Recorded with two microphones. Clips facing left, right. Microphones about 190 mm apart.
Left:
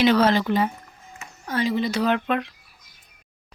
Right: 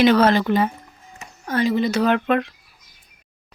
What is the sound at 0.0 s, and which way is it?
Speech, 55° right (ahead or behind).